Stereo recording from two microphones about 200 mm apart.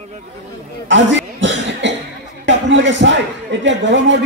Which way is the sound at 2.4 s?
65° right (ahead or behind).